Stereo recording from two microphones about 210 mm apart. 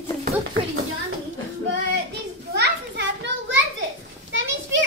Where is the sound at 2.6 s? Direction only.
55° right (ahead or behind).